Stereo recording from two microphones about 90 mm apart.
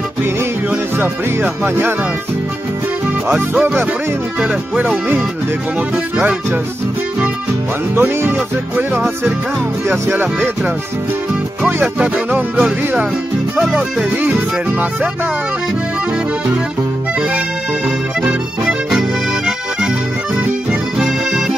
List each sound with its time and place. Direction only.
0.2 s music: 25° right (ahead or behind)
3.5 s music: 20° right (ahead or behind)
7.9 s music: 25° right (ahead or behind)
11.6 s music: 10° right (ahead or behind)
13.6 s music: 5° right (ahead or behind)
18.9 s music: 5° right (ahead or behind)